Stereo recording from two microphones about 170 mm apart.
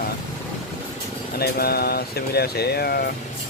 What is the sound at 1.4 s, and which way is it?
Speech, 65° left (ahead or behind).